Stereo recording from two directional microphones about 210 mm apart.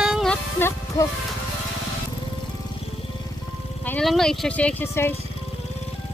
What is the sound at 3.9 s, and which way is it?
Speech, 5° left (ahead or behind).